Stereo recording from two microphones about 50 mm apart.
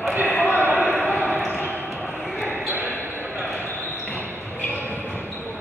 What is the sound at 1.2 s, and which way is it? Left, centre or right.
Basketball bounce, right.